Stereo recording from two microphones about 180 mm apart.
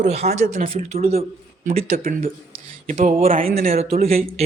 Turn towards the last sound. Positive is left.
turn(degrees=-55)  # may be behind; listen again after turning